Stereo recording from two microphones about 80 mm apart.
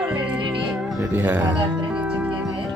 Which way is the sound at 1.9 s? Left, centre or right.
Centre.